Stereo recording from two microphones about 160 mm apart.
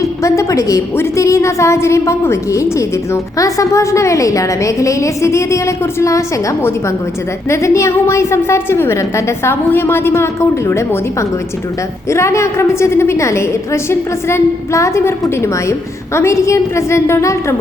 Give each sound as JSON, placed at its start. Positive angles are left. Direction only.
{"t": 0.0, "sound": "a woman's voice", "side_deg": 20}